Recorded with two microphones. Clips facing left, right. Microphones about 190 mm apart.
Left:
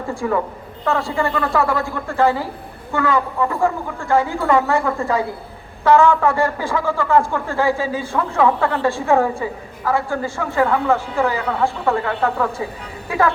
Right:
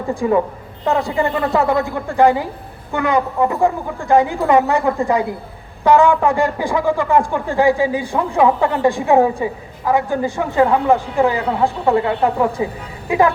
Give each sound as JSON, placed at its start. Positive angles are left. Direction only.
{"t": 0.1, "sound": "a woman's voice", "side_deg": -20}